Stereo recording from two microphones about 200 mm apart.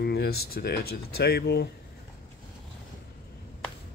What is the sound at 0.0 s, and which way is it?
Speech, 55° left (ahead or behind).